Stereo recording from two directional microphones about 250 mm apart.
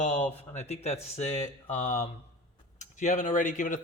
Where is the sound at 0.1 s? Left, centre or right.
Centre.